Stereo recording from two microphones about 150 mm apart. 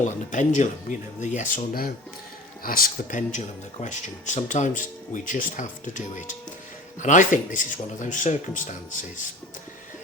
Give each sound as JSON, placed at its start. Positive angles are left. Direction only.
{"t": 0.0, "sound": "speech", "side_deg": 55}